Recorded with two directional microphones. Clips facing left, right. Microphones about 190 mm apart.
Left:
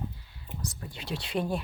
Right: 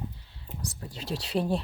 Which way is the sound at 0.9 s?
35° right (ahead or behind).